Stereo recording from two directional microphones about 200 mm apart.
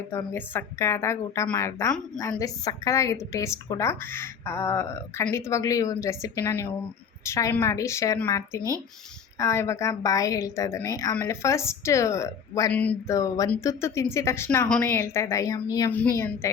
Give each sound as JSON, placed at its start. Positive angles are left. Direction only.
{"t": 0.1, "sound": "a woman's voice", "side_deg": 10}